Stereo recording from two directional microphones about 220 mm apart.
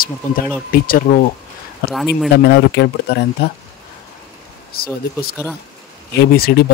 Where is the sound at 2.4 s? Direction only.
45° left (ahead or behind).